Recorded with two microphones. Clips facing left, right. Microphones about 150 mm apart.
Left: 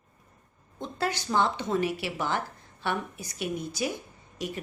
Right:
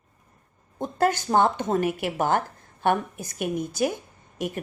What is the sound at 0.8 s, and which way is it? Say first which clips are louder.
A woman's voice: right 8 dB; 50° right (ahead or behind).